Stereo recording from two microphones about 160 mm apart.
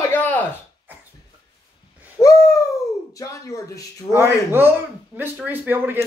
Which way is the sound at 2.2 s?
20° left (ahead or behind).